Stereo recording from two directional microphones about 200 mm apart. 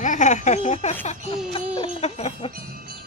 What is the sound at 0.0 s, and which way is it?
Speech, 40° left (ahead or behind).